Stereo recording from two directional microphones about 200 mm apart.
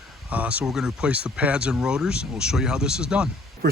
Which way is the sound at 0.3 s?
5° right (ahead or behind).